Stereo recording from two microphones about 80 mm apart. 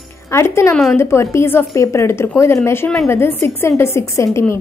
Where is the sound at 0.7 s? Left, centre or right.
Centre.